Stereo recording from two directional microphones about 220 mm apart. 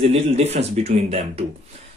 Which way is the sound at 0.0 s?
30° right (ahead or behind).